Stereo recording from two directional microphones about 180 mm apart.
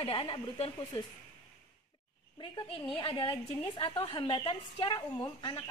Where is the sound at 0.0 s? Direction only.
30° left (ahead or behind).